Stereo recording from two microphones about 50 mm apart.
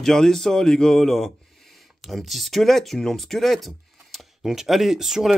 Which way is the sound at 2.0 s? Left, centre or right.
Centre.